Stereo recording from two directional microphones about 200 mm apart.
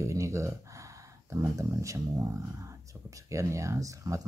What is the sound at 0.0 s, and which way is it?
Speech, 15° right (ahead or behind).